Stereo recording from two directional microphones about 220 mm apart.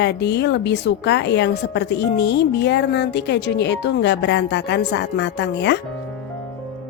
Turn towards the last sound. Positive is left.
turn(degrees=50)  # may be behind; listen again after turning